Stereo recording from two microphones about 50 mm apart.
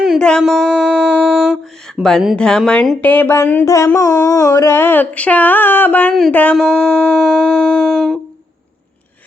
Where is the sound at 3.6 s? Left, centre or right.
Left.